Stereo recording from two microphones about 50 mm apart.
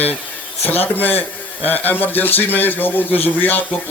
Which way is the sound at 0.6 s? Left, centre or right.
Left.